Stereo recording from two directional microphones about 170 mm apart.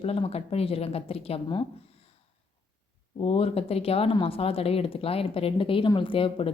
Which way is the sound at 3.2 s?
35° left (ahead or behind).